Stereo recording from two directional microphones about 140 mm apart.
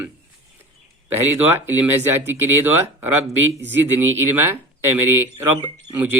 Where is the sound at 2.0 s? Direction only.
15° right (ahead or behind).